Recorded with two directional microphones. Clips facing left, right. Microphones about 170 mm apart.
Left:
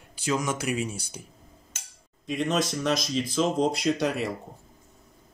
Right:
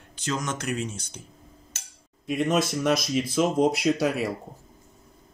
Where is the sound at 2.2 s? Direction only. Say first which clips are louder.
Right 2 dB; 10° right (ahead or behind).